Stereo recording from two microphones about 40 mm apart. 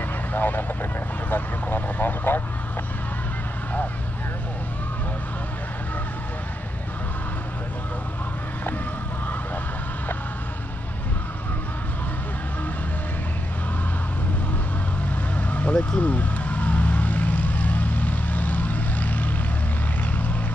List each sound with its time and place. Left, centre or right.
0.3 s speech: left
15.3 s vehicle: left